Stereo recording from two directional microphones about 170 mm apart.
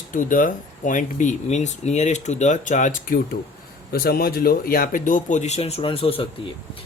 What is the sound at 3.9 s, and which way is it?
Speech, 60° left (ahead or behind).